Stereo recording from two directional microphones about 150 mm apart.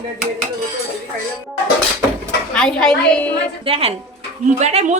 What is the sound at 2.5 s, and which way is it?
Speech, 5° left (ahead or behind).